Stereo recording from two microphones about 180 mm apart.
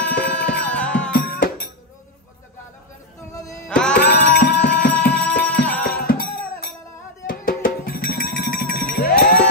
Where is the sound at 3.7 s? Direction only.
5° left (ahead or behind).